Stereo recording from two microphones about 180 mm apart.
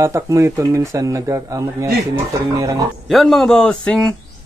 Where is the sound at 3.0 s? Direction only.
Centre (ahead or behind).